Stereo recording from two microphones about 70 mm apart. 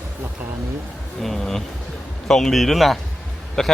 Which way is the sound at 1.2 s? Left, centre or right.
Centre.